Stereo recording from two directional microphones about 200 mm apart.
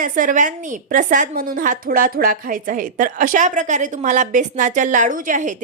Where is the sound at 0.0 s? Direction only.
40° right (ahead or behind).